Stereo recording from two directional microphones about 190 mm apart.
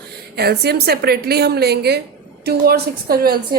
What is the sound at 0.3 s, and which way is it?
A woman's voice, 55° right (ahead or behind).